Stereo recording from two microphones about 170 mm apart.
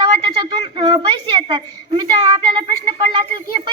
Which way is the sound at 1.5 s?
25° right (ahead or behind).